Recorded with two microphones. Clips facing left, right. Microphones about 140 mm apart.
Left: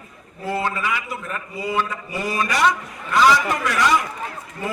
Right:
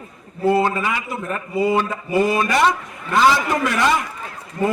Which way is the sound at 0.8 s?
45° right (ahead or behind).